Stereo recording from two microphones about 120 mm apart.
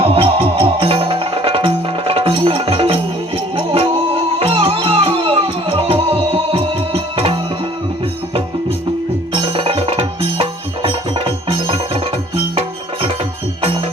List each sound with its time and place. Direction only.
0.0 s music: 50° right (ahead or behind)
9.3 s music: 50° right (ahead or behind)